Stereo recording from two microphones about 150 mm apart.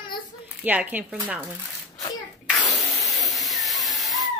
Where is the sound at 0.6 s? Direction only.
10° right (ahead or behind).